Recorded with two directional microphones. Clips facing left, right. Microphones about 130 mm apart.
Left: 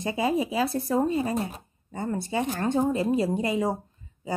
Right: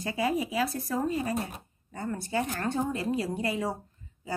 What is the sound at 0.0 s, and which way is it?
A woman's voice, 25° left (ahead or behind).